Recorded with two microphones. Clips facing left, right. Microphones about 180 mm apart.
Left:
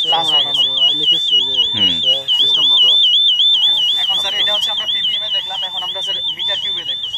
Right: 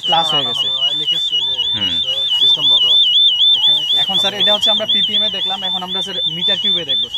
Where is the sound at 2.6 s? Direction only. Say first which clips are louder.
Right 3 dB; 15° right (ahead or behind).